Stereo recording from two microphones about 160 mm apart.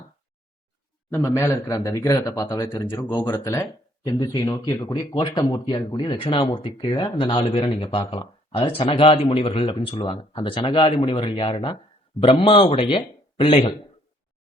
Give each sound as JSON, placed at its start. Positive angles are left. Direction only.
{"t": 1.1, "sound": "speech", "side_deg": 20}